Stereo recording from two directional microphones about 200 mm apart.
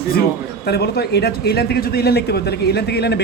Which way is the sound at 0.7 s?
55° left (ahead or behind).